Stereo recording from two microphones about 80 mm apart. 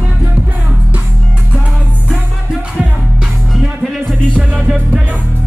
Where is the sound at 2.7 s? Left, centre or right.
Centre.